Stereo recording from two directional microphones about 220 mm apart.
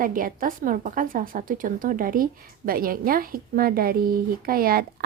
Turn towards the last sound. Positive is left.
turn(degrees=-40)  # may be behind; listen again after turning